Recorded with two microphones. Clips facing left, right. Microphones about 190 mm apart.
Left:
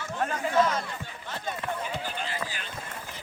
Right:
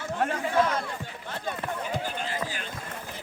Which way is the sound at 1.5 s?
45° right (ahead or behind).